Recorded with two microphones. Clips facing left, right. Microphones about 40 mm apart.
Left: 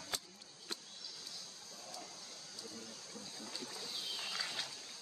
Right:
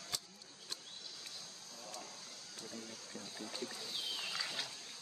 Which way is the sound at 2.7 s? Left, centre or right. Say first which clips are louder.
Right 2 dB; centre.